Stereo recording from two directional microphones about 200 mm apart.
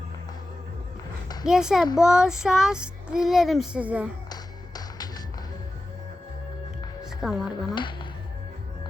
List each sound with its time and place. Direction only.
1.5 s speech: 5° right (ahead or behind)
4.3 s music: 20° left (ahead or behind)
7.0 s music: 5° right (ahead or behind)